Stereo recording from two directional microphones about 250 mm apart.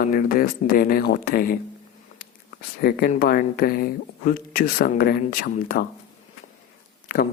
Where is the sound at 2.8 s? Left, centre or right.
Left.